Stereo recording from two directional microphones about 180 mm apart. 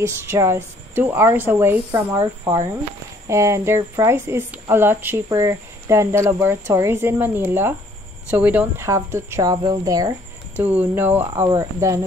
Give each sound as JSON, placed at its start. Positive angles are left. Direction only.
{"t": 0.0, "sound": "speech", "side_deg": -15}
{"t": 10.5, "sound": "speech", "side_deg": -10}